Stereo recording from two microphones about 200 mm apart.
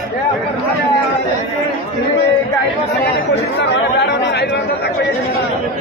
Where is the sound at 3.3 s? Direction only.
55° left (ahead or behind).